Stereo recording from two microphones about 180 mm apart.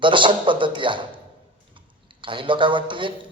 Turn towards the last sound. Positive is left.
turn(degrees=-25)  # may be behind; listen again after turning